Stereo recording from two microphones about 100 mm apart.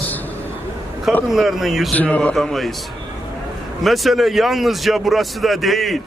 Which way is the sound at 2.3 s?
Centre (ahead or behind).